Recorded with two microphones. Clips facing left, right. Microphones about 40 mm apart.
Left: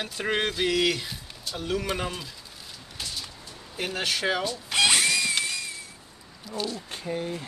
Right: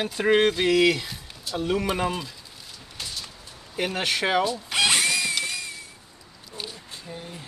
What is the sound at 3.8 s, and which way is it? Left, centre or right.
Speech, centre.